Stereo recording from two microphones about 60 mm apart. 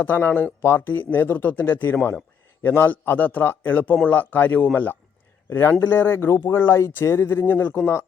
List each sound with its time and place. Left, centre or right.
0.0 s speech: left
5.5 s speech: left